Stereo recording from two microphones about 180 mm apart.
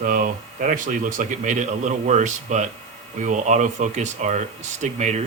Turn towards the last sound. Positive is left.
turn(degrees=-40)  # may be behind; listen again after turning